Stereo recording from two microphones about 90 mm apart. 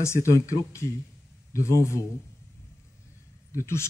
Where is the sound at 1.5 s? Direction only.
35° left (ahead or behind).